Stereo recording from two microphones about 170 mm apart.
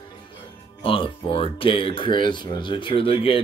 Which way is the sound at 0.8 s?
30° left (ahead or behind).